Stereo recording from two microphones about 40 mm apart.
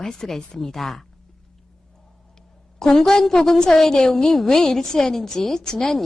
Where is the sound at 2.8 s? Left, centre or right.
Centre.